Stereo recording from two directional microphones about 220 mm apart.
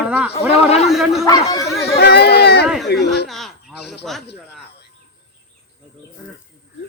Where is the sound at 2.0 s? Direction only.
45° left (ahead or behind).